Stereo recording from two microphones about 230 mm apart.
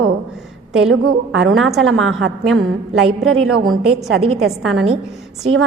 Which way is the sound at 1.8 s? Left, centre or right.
Right.